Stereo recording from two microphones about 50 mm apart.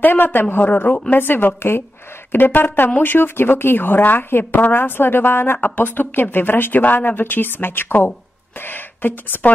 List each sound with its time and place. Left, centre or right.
0.0 s a woman's voice: left